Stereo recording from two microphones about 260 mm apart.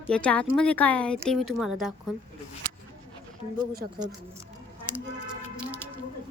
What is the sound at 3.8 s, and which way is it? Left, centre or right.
Speech, right.